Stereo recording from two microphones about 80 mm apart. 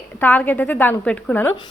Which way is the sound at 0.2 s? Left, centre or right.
Left.